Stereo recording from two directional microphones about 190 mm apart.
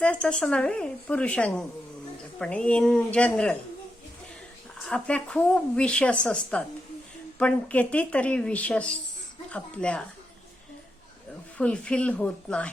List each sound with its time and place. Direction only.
0.0 s a woman's voice: 5° left (ahead or behind)
4.8 s a woman's voice: 5° left (ahead or behind)
11.5 s speech: 5° left (ahead or behind)